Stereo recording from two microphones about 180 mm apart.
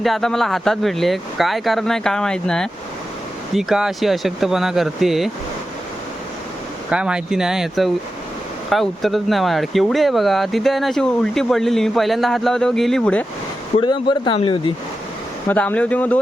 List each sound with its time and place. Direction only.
0.0 s speech: centre (ahead or behind)
6.9 s speech: 5° right (ahead or behind)
13.7 s speech: 25° left (ahead or behind)
15.4 s speech: 10° left (ahead or behind)